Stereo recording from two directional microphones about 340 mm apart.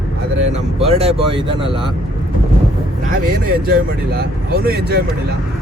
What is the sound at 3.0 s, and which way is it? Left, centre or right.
Speech, right.